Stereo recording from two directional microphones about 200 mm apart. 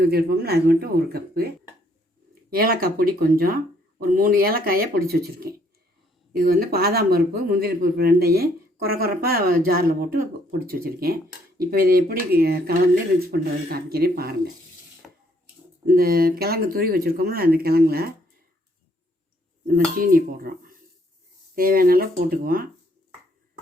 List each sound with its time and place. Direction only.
0.0 s speech: 50° right (ahead or behind)
2.5 s speech: 50° right (ahead or behind)
15.0 s a sound: centre (ahead or behind)
15.9 s speech: 50° right (ahead or behind)
19.6 s speech: 45° right (ahead or behind)